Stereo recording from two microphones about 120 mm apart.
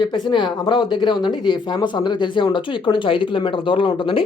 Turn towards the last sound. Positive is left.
turn(degrees=45)  # may be behind; listen again after turning